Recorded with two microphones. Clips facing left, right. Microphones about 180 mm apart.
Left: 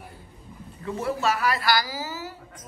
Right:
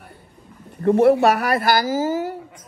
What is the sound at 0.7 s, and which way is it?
Speech, 60° right (ahead or behind).